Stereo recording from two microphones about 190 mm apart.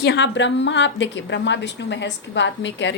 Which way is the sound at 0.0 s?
65° left (ahead or behind).